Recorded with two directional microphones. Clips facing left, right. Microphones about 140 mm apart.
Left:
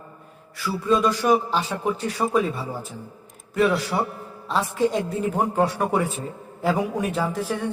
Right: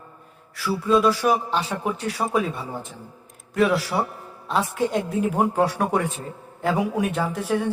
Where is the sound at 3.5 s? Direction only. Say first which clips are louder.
Even; centre (ahead or behind).